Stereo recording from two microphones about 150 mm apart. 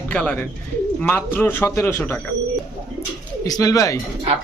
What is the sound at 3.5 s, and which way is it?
Speech, 25° left (ahead or behind).